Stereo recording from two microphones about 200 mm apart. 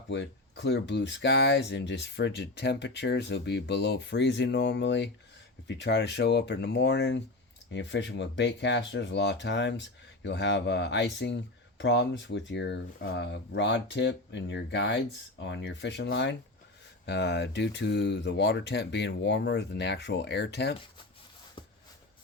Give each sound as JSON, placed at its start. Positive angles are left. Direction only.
{"t": 0.1, "sound": "speech", "side_deg": 60}